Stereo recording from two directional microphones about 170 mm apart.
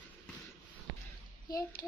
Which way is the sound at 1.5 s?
20° left (ahead or behind).